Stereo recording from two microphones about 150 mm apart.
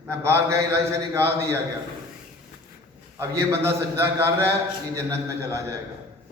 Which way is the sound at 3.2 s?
15° right (ahead or behind).